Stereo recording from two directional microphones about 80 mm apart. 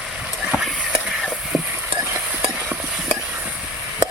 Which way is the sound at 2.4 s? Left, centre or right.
Centre.